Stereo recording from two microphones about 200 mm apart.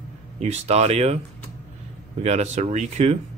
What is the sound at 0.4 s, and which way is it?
Speech, 35° right (ahead or behind).